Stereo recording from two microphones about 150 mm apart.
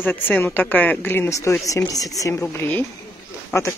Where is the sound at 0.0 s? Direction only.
10° left (ahead or behind).